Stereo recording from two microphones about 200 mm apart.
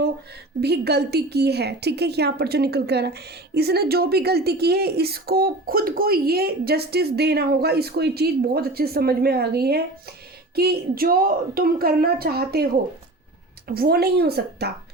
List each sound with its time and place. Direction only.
0.6 s a woman's voice: 55° right (ahead or behind)
13.7 s a woman's voice: 50° right (ahead or behind)